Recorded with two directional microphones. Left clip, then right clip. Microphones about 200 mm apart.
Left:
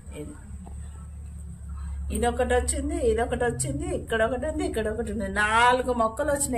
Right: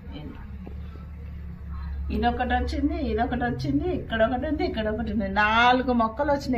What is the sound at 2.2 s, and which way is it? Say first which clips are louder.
A woman's voice: left 1 dB; 55° left (ahead or behind).